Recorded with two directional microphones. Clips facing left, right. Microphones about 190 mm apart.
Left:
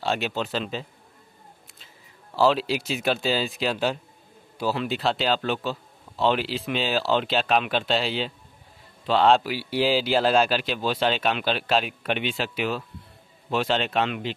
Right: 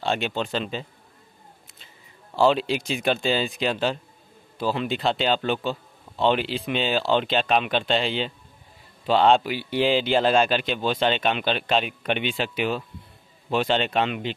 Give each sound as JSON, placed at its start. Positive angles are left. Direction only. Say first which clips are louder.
{"t": 0.0, "sound": "speech", "louder": "right 1 dB", "side_deg": 5}
{"t": 2.3, "sound": "speech", "louder": "right 1 dB", "side_deg": 0}